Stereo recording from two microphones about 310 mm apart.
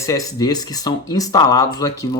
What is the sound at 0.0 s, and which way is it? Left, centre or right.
Speech, centre.